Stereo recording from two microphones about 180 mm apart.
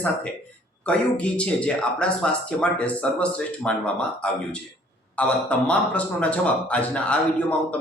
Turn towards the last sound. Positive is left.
turn(degrees=10)  # may be behind; listen again after turning